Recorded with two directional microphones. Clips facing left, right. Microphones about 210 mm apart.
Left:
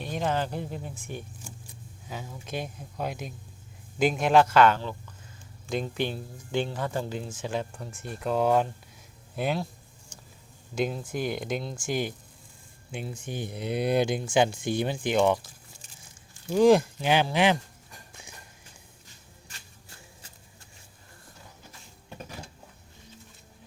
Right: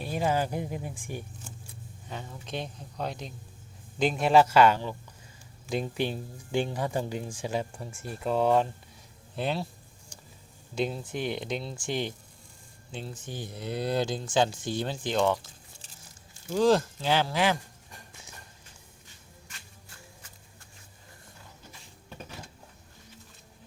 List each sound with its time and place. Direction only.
0.0 s speech: 10° right (ahead or behind)
2.0 s speech: 5° left (ahead or behind)
10.8 s speech: centre (ahead or behind)
16.5 s speech: 15° left (ahead or behind)